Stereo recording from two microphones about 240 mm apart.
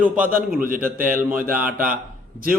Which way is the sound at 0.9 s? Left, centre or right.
Right.